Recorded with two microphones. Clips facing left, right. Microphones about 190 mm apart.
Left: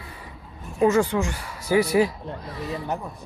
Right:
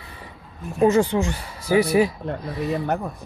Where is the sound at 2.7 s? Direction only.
60° right (ahead or behind).